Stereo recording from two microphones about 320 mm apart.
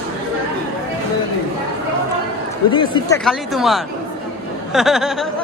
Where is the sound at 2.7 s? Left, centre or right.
Centre.